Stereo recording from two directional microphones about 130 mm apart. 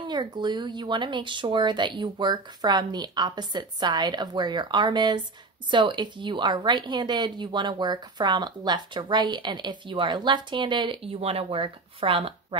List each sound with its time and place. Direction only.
0.0 s a woman's voice: 35° right (ahead or behind)